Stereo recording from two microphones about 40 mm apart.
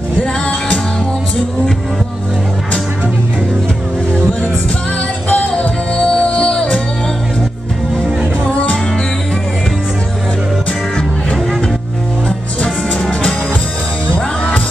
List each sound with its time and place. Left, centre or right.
0.2 s music: left
5.3 s music: left
8.5 s music: left
12.6 s music: centre
14.0 s music: left